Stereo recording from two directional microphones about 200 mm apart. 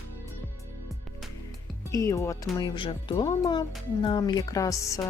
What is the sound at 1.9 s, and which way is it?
A woman's voice, 15° left (ahead or behind).